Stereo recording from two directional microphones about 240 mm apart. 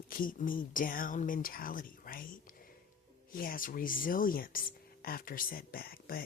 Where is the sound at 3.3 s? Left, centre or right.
Left.